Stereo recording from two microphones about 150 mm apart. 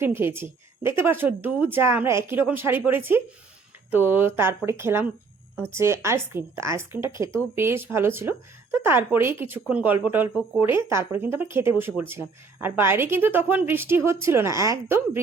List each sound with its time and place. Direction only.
0.0 s speech: 15° right (ahead or behind)